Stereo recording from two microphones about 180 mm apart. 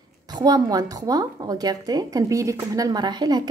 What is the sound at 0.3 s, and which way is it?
A woman's voice, 20° right (ahead or behind).